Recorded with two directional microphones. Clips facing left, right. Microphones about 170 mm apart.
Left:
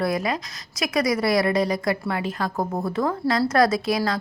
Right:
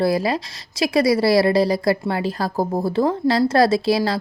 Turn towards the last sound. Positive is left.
turn(degrees=-30)  # may be behind; listen again after turning